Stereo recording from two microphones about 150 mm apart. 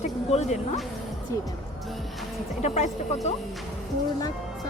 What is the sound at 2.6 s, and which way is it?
Speech, 45° left (ahead or behind).